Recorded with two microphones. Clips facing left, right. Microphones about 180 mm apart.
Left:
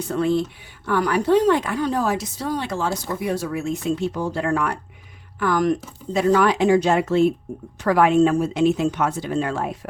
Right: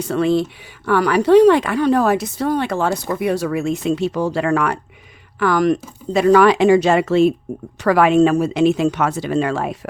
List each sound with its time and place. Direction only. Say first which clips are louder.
0.0 s a woman's voice: right 4 dB; 85° right